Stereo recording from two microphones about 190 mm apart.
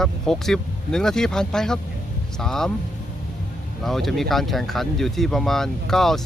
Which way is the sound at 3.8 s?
Centre (ahead or behind).